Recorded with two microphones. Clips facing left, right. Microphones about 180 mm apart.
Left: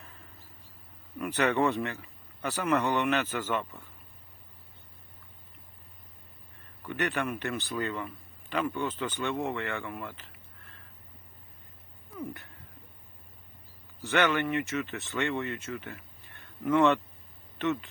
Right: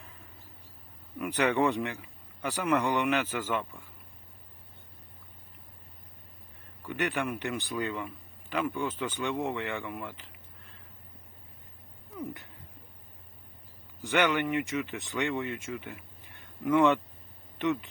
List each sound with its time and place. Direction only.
1.2 s speech: 10° right (ahead or behind)
6.8 s a man's voice: 10° right (ahead or behind)
12.1 s speech: 20° right (ahead or behind)
14.0 s speech: 15° right (ahead or behind)